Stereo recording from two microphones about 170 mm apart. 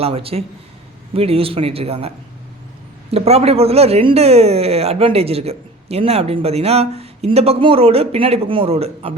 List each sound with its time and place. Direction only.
0.0 s speech: 35° right (ahead or behind)